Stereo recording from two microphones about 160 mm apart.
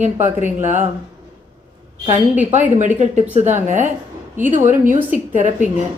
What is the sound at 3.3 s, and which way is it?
A woman's voice, 50° right (ahead or behind).